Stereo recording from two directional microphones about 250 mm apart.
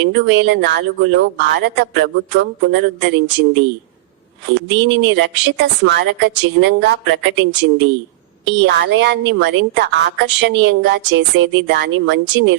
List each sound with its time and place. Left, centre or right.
0.0 s a woman's voice: right
4.9 s a woman's voice: right